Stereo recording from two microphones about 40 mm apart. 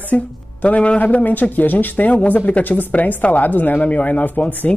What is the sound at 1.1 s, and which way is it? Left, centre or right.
Speech, left.